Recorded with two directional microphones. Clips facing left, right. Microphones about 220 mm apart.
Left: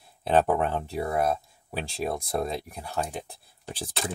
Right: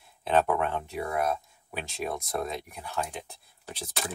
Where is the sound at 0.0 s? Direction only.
35° left (ahead or behind).